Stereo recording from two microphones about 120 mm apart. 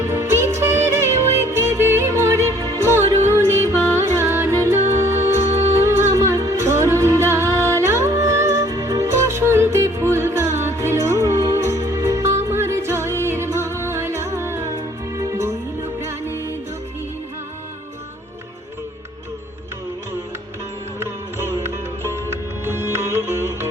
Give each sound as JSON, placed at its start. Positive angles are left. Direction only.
{"t": 0.0, "sound": "music", "side_deg": -20}
{"t": 21.0, "sound": "music", "side_deg": -20}